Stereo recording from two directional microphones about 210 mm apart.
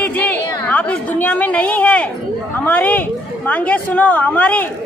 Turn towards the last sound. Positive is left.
turn(degrees=5)  # may be behind; listen again after turning